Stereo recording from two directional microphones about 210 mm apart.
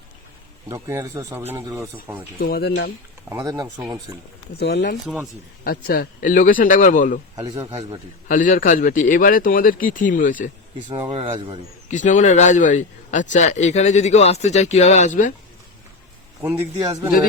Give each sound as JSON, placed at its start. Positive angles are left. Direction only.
{"t": 0.7, "sound": "speech", "side_deg": -15}
{"t": 2.4, "sound": "speech", "side_deg": 50}
{"t": 3.2, "sound": "speech", "side_deg": -15}
{"t": 4.6, "sound": "speech", "side_deg": 55}
{"t": 7.3, "sound": "a man's voice", "side_deg": -20}
{"t": 8.3, "sound": "speech", "side_deg": 40}
{"t": 11.1, "sound": "a man's voice", "side_deg": -25}
{"t": 11.9, "sound": "speech", "side_deg": 35}
{"t": 16.4, "sound": "speech", "side_deg": -15}